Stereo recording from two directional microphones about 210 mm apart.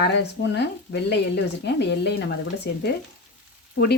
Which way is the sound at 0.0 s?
55° left (ahead or behind).